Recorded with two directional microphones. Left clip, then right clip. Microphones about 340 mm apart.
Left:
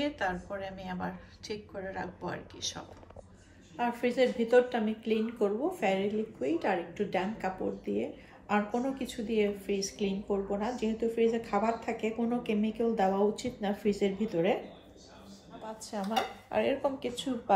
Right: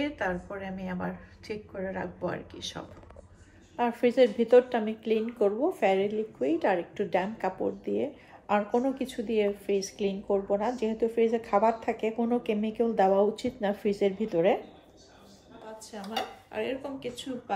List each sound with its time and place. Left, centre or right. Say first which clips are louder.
0.0 s a woman's voice: right 1 dB; centre
3.7 s a woman's voice: right 5 dB; right
15.9 s speech: left 2 dB; centre